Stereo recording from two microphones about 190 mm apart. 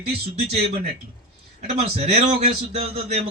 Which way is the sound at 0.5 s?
35° right (ahead or behind).